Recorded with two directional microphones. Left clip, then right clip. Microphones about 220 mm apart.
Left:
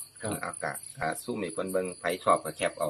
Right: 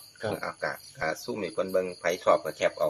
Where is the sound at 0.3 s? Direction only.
15° left (ahead or behind).